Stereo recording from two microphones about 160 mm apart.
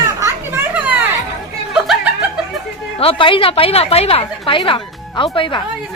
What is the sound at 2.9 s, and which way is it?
A woman's voice, 35° left (ahead or behind).